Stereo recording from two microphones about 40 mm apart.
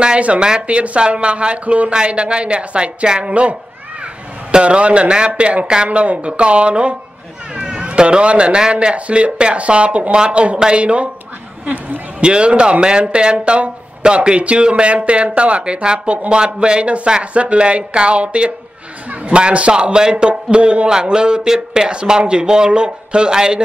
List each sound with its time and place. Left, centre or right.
0.6 s speech: right
11.6 s speech: right
12.2 s speech: right